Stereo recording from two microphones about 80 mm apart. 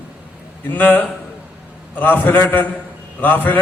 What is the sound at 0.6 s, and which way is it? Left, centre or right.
A man's voice, left.